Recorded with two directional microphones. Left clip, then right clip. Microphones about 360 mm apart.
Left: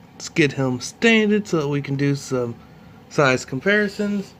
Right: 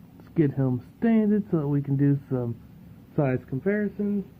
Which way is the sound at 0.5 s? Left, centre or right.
Centre.